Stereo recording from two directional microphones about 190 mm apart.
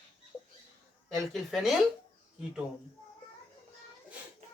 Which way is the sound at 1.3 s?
Centre (ahead or behind).